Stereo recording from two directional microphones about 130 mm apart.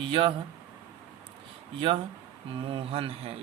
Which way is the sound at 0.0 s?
40° right (ahead or behind).